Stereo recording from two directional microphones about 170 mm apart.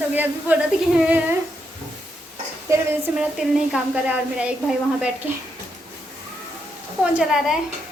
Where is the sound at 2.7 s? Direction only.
15° right (ahead or behind).